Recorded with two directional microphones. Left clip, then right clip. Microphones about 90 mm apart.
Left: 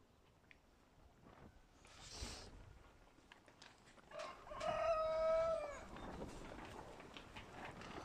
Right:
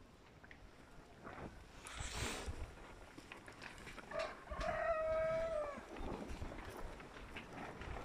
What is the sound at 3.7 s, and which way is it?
Dog, 45° left (ahead or behind).